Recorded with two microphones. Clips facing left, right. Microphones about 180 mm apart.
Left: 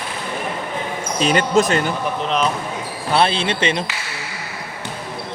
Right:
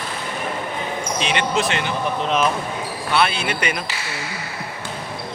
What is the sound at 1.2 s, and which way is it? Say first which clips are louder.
Speech: left 7 dB; 40° left (ahead or behind).